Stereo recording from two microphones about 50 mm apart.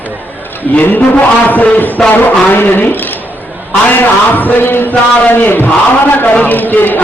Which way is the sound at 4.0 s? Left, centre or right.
Left.